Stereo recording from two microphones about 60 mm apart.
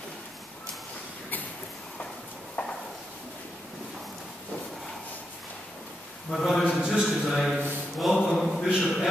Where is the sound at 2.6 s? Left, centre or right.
Left.